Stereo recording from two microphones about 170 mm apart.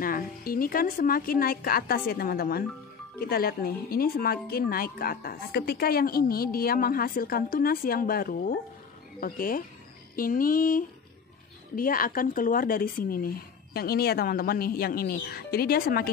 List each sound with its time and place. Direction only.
0.0 s speech: 55° left (ahead or behind)